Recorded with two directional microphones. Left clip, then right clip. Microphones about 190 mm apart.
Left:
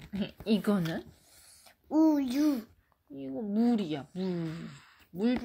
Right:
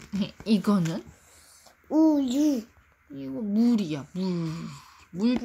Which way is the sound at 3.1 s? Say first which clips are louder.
Right 4 dB; 45° right (ahead or behind).